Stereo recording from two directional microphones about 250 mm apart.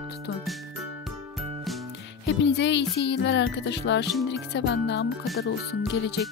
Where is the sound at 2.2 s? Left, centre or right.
Left.